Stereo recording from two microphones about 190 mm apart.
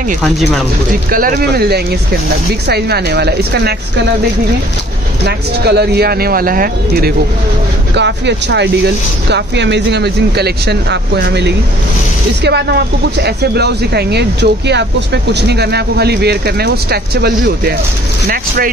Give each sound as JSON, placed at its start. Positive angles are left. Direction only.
{"t": 1.1, "sound": "speech", "side_deg": -50}
{"t": 5.2, "sound": "speech", "side_deg": -60}
{"t": 7.9, "sound": "speech", "side_deg": -65}